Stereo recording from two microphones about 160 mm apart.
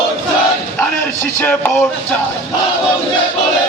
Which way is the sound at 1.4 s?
10° left (ahead or behind).